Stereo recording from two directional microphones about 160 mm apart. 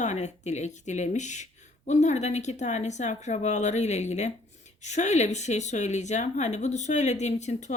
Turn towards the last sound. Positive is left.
turn(degrees=45)  # may be behind; listen again after turning